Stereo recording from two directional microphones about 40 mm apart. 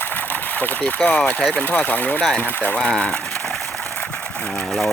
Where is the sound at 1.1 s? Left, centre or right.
Left.